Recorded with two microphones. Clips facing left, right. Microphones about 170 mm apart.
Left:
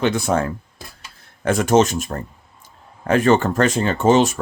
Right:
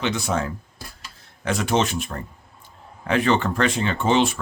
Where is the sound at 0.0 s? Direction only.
50° left (ahead or behind).